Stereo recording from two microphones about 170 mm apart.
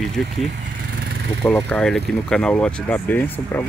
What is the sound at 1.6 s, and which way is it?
Speech, 5° left (ahead or behind).